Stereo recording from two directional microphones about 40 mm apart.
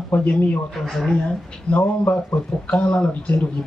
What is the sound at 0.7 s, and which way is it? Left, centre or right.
Speech, centre.